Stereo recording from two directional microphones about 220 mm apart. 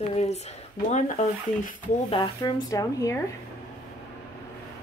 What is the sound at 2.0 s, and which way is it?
Speech, 20° left (ahead or behind).